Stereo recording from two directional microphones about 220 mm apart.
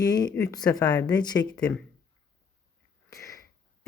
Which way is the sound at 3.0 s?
15° left (ahead or behind).